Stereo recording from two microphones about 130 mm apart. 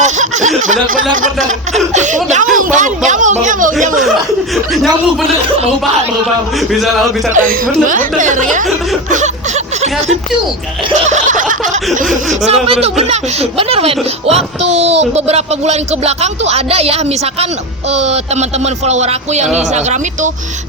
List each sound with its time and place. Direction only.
0.0 s snicker: 65° right (ahead or behind)
1.1 s speech: 80° right
1.9 s speech: 65° right (ahead or behind)
2.6 s speech: 80° right
4.0 s speech: centre (ahead or behind)
6.6 s speech: centre (ahead or behind)
7.3 s speech: 90° right; by 9.3 s 75° right (ahead or behind)
11.1 s snicker: 85° right
12.5 s speech: 50° right (ahead or behind)